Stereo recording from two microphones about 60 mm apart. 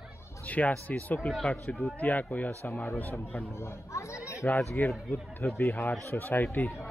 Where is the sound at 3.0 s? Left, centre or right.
Left.